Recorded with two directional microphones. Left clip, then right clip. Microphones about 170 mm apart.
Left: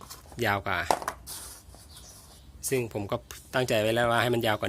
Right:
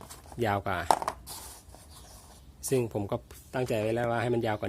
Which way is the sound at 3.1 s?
15° right (ahead or behind).